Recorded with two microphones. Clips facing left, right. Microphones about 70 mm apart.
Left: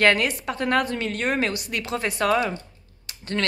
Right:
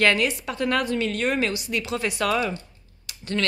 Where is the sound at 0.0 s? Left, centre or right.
Left.